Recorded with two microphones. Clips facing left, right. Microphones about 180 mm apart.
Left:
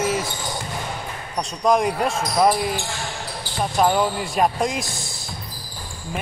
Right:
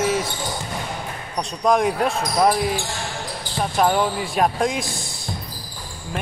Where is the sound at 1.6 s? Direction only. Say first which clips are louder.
Right 1 dB; centre (ahead or behind).